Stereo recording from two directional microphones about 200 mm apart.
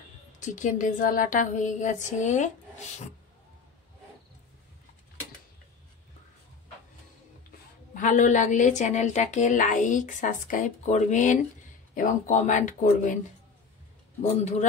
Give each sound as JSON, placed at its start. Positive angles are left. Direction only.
{"t": 0.4, "sound": "a woman's voice", "side_deg": 40}
{"t": 7.9, "sound": "a woman's voice", "side_deg": 40}
{"t": 14.3, "sound": "a woman's voice", "side_deg": 35}